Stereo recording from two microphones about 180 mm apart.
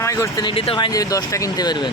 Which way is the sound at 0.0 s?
15° left (ahead or behind).